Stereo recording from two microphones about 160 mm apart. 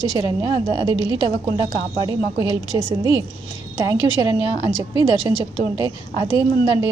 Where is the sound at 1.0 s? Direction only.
25° left (ahead or behind).